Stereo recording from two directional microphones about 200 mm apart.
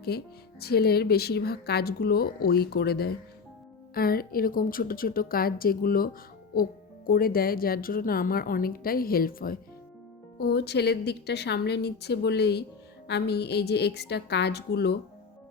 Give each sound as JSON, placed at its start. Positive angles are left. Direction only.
{"t": 0.1, "sound": "a woman's voice", "side_deg": 55}